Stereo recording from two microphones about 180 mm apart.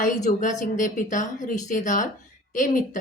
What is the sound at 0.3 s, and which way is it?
Speech, 45° left (ahead or behind).